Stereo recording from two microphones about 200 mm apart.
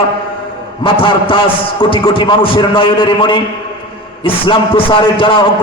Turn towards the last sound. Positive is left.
turn(degrees=25)  # may be behind; listen again after turning